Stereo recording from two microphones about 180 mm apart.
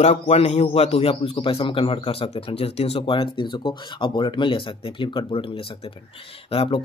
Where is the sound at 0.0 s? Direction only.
35° left (ahead or behind).